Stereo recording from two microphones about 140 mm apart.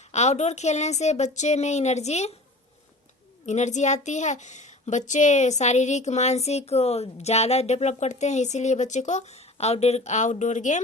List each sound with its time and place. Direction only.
0.1 s a woman's voice: 55° left (ahead or behind)
3.4 s a woman's voice: 60° left (ahead or behind)